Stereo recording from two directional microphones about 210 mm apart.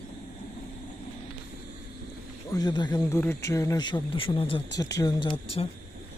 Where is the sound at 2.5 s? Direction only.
20° left (ahead or behind).